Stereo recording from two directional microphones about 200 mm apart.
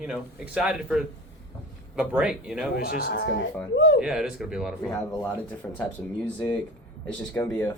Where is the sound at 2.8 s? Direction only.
50° left (ahead or behind).